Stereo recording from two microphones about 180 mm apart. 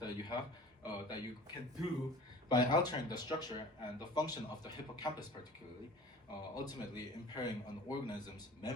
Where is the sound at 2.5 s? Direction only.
25° left (ahead or behind).